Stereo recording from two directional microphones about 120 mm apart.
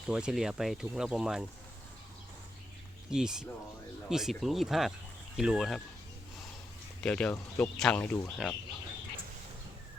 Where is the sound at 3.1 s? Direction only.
5° right (ahead or behind).